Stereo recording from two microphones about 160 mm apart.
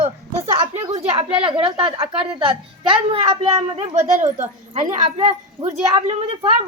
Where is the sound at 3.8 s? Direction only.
50° right (ahead or behind).